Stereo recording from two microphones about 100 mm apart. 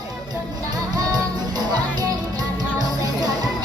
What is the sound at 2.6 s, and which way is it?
Music, 40° right (ahead or behind).